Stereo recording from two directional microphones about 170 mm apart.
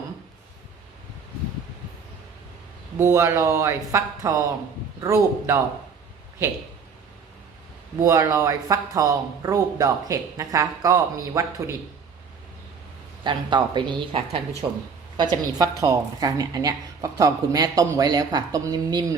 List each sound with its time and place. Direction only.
3.0 s speech: 20° right (ahead or behind)
8.0 s speech: 20° right (ahead or behind)
13.2 s speech: 25° right (ahead or behind)